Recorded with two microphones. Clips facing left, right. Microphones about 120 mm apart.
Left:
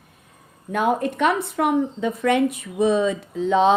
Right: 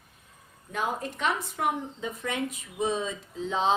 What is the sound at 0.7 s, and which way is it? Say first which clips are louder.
Speech: left 10 dB; 65° left (ahead or behind).